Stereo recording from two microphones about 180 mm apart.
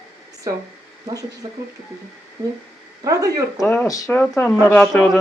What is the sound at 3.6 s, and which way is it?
Speech, 5° left (ahead or behind).